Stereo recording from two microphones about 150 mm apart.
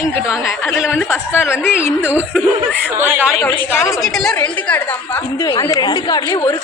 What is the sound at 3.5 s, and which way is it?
Speech, 15° left (ahead or behind).